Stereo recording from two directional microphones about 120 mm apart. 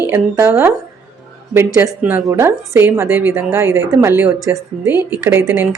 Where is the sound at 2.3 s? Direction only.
25° right (ahead or behind).